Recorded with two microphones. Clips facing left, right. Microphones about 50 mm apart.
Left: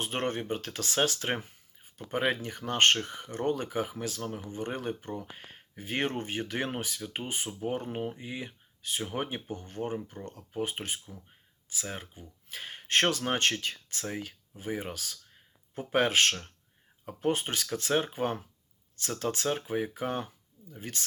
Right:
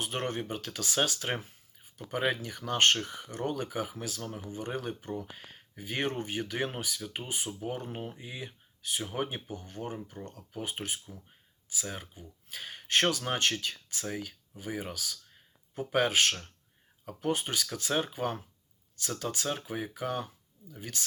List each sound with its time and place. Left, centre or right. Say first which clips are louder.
0.0 s speech: left 2 dB; left
4.2 s speech: left 3 dB; left
4.4 s speech: even; left
8.2 s speech: left 3 dB; left